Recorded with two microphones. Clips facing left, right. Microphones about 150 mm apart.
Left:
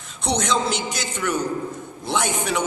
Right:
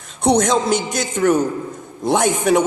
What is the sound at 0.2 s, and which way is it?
A man's voice, 50° right (ahead or behind).